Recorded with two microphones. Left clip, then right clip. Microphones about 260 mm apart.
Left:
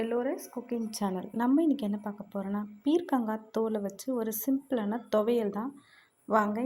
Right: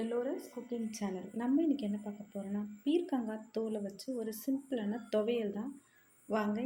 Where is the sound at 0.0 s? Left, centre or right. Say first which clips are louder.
Left 5 dB; left.